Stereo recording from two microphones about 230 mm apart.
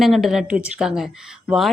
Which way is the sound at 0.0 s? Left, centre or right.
Centre.